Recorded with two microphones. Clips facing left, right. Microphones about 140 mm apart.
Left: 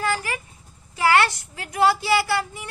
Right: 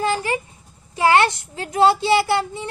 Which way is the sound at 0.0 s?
25° right (ahead or behind).